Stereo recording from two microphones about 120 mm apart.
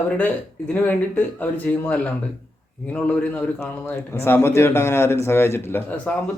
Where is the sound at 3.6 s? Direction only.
20° left (ahead or behind).